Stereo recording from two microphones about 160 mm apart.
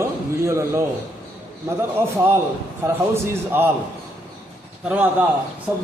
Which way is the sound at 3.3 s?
15° right (ahead or behind).